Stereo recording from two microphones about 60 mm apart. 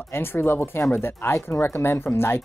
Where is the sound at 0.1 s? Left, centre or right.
Left.